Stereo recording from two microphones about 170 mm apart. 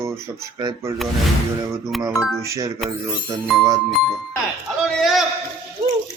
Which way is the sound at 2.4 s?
20° right (ahead or behind).